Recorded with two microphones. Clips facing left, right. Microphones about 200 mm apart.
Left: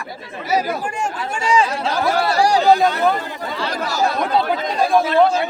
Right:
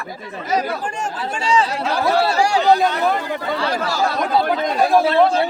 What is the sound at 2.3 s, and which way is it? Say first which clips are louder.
Speech: left 2 dB; 35° left (ahead or behind).